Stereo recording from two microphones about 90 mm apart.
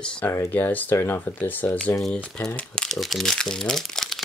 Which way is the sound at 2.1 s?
10° left (ahead or behind).